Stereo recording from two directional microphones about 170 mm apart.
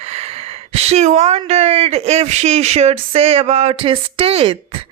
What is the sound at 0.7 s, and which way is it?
Speech, 35° right (ahead or behind).